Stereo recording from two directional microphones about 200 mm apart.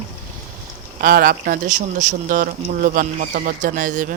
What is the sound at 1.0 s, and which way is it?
Speech, 45° right (ahead or behind).